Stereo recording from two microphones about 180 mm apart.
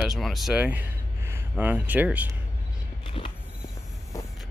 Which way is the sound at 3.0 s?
30° left (ahead or behind).